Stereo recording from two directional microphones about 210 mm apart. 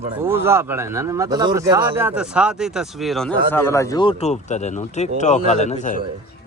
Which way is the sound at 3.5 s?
15° left (ahead or behind).